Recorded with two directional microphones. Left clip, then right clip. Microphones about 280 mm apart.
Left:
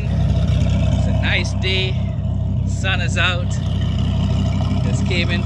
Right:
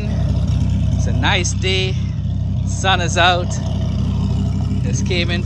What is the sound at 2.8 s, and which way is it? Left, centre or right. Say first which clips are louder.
Speech: right 6 dB; centre.